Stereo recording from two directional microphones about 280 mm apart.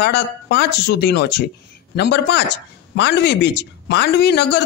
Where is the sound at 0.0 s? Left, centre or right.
Left.